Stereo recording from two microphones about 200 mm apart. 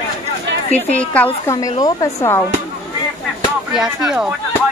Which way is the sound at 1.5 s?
15° left (ahead or behind).